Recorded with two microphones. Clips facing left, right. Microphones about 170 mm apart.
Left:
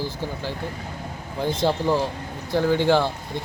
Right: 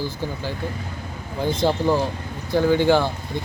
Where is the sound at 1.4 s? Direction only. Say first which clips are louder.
Right 2 dB; centre (ahead or behind).